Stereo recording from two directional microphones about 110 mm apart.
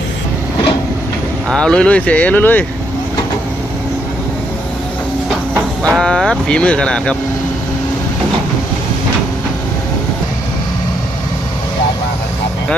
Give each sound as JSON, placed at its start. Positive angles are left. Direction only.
{"t": 1.5, "sound": "speech", "side_deg": 5}
{"t": 5.8, "sound": "speech", "side_deg": 5}